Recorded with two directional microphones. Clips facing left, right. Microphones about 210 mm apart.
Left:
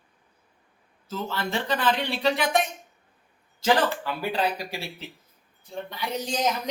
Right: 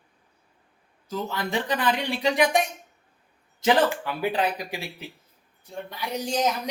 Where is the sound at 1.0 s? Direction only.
15° right (ahead or behind).